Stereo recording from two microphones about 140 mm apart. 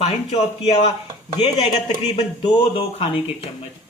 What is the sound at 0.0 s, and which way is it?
Speech, 50° left (ahead or behind).